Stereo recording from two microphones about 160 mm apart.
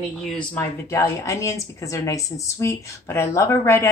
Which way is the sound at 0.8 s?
20° left (ahead or behind).